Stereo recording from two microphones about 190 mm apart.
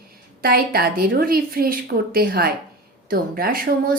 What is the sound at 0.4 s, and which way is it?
A woman's voice, 50° right (ahead or behind).